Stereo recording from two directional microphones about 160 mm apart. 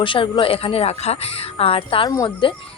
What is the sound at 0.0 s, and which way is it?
A woman's voice, 30° left (ahead or behind).